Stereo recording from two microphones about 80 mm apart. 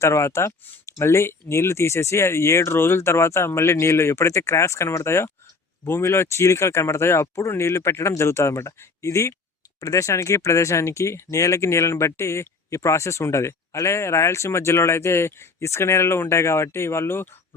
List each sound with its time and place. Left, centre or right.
0.0 s speech: left